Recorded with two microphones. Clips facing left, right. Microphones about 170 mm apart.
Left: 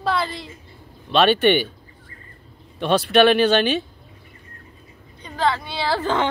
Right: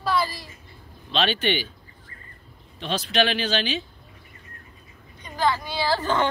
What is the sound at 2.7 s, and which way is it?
Speech, 60° left (ahead or behind).